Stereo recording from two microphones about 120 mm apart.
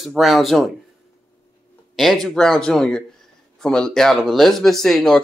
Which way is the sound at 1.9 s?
Centre (ahead or behind).